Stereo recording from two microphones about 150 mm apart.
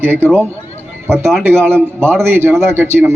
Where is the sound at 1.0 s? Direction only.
15° right (ahead or behind).